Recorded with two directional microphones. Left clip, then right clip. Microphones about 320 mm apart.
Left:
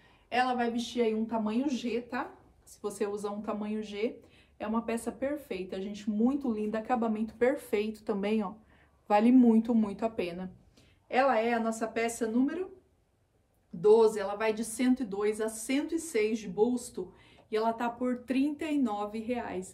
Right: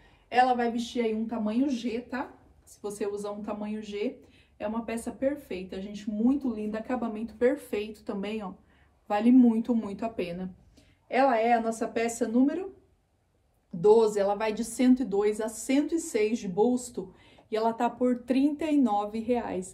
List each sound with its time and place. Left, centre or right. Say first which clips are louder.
0.3 s a woman's voice: right 5 dB; centre
13.7 s a woman's voice: right 2 dB; centre